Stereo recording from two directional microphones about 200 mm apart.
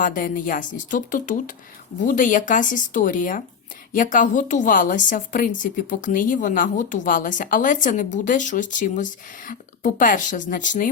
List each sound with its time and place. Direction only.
0.0 s a woman's voice: 45° left (ahead or behind)